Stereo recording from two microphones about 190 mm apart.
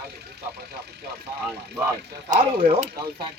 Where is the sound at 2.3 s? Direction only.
35° right (ahead or behind).